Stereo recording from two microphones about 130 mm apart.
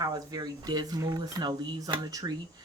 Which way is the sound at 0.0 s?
30° right (ahead or behind).